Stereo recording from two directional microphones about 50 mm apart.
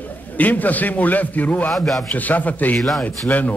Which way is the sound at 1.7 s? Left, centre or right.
Centre.